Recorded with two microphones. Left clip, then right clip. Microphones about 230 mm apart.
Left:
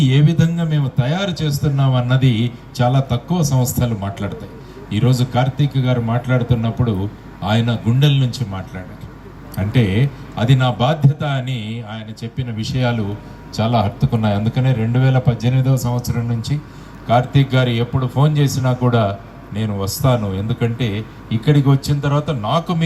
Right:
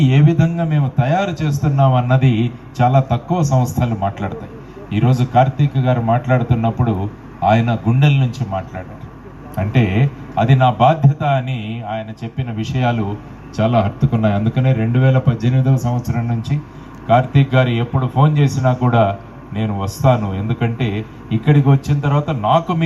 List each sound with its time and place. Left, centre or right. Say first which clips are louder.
0.0 s a man's voice: right 2 dB; left
9.7 s a man's voice: even; left
17.1 s a man's voice: right 2 dB; left